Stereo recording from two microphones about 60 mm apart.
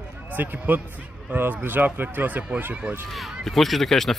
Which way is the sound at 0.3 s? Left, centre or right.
Right.